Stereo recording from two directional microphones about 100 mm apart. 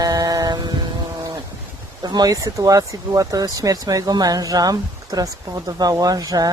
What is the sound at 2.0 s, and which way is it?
Speech, 40° right (ahead or behind).